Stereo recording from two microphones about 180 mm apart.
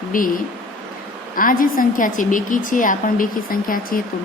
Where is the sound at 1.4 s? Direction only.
50° left (ahead or behind).